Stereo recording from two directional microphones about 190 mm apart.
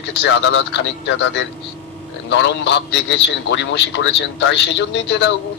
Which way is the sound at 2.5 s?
65° left (ahead or behind).